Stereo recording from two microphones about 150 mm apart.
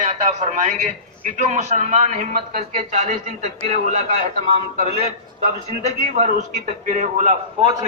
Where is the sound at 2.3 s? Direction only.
70° right (ahead or behind); by 4.0 s 50° right (ahead or behind).